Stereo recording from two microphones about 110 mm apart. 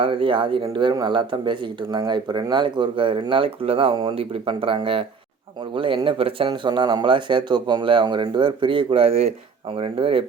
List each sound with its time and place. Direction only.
0.0 s a man's voice: 50° right (ahead or behind)
6.5 s a man's voice: 45° right (ahead or behind)